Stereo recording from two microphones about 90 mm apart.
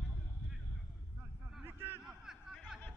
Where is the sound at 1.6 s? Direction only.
20° right (ahead or behind).